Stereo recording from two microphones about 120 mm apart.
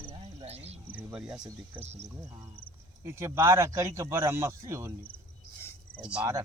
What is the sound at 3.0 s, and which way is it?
Speech, 25° right (ahead or behind).